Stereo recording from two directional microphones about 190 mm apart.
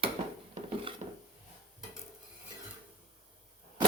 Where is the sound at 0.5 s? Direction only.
25° right (ahead or behind).